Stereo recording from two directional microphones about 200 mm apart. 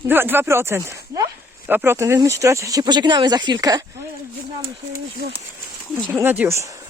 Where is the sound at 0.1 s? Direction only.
10° right (ahead or behind).